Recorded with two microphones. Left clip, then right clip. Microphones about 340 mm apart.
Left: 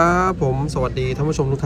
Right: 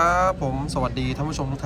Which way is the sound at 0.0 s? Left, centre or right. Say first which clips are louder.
Left 3 dB; centre.